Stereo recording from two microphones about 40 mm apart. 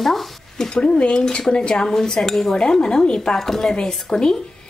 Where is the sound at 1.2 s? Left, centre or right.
Centre.